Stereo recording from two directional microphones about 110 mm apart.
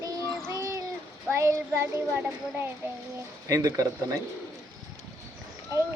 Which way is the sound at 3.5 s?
30° right (ahead or behind).